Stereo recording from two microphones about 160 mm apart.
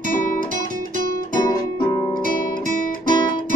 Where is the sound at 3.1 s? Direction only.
55° right (ahead or behind).